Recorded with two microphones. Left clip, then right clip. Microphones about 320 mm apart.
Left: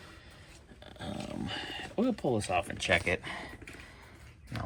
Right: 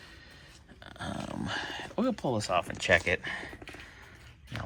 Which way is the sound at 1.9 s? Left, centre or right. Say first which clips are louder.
Even; centre.